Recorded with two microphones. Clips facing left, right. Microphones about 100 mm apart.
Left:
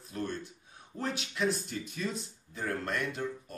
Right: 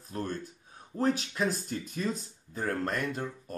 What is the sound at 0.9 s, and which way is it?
Speech, 40° right (ahead or behind).